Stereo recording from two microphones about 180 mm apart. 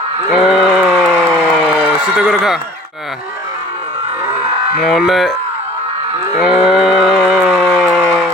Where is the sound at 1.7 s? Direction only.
5° right (ahead or behind).